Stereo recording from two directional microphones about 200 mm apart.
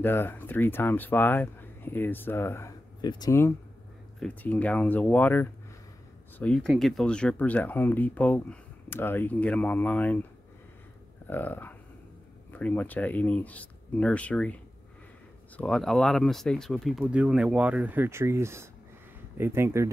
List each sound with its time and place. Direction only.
0.0 s speech: 10° left (ahead or behind)
11.2 s speech: 10° left (ahead or behind); by 19.9 s 10° right (ahead or behind)